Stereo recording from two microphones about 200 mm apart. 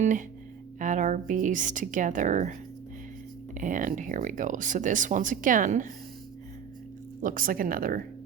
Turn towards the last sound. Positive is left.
turn(degrees=-45)  # may be behind; listen again after turning